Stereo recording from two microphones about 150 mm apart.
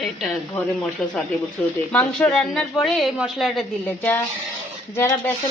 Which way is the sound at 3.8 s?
15° left (ahead or behind).